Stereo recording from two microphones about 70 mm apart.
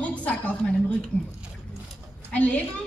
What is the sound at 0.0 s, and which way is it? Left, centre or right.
Speech, centre.